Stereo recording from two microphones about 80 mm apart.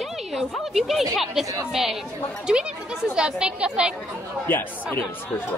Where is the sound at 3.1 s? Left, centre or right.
Centre.